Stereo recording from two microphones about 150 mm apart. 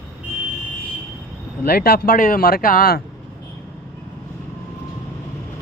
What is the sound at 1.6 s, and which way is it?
Speech, 90° left.